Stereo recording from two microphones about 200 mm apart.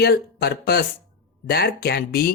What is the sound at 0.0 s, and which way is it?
Speech, 50° left (ahead or behind).